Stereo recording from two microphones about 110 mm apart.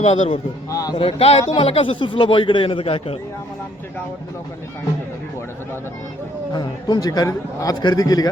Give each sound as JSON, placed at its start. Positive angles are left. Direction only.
{"t": 0.0, "sound": "speech", "side_deg": 80}
{"t": 0.7, "sound": "a man's voice", "side_deg": 30}
{"t": 0.9, "sound": "speech", "side_deg": 60}
{"t": 6.5, "sound": "a man's voice", "side_deg": 40}